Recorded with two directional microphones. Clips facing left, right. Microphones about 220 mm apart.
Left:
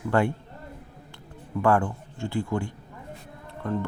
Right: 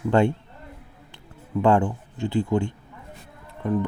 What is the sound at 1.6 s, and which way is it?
Speech, 20° right (ahead or behind).